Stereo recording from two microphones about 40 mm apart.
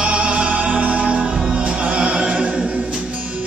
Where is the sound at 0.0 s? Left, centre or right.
Right.